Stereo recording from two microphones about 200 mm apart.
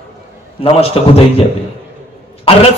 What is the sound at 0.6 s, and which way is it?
Speech, 30° left (ahead or behind).